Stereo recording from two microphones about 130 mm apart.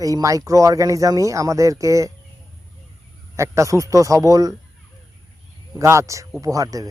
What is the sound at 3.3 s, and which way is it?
Speech, 25° right (ahead or behind).